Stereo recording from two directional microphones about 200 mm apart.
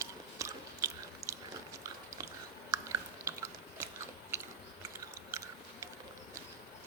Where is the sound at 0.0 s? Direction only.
15° right (ahead or behind).